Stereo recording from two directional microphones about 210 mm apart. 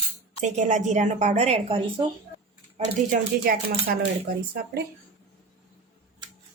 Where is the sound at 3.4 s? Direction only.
45° right (ahead or behind).